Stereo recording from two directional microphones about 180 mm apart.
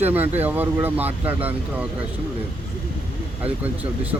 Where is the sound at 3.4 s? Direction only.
10° right (ahead or behind).